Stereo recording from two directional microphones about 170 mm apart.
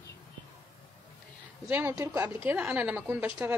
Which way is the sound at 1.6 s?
15° right (ahead or behind).